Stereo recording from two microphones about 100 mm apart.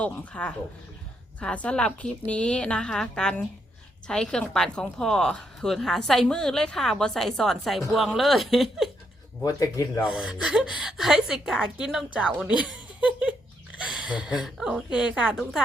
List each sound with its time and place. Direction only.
0.0 s a woman's voice: 15° left (ahead or behind)
9.4 s speech: 35° left (ahead or behind)
10.1 s a woman's voice: 10° right (ahead or behind)
12.4 s laughter: 10° right (ahead or behind)
13.7 s a sound: 10° right (ahead or behind)
14.4 s a woman's voice: 5° right (ahead or behind)